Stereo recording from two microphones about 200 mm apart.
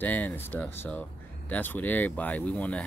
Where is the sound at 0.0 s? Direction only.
10° left (ahead or behind).